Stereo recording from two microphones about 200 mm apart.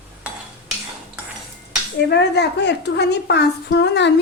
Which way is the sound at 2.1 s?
55° left (ahead or behind).